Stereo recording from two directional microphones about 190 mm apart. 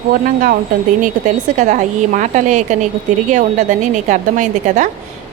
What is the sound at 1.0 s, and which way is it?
A woman's voice, 40° right (ahead or behind).